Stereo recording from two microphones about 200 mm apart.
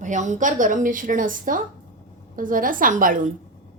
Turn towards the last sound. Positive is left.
turn(degrees=-40)  # may be behind; listen again after turning